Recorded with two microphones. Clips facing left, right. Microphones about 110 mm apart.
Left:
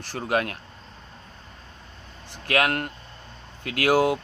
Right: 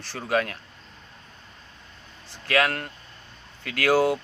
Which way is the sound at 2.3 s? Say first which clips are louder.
Even; 20° left (ahead or behind).